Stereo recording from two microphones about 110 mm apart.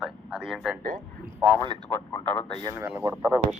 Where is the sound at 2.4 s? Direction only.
55° left (ahead or behind).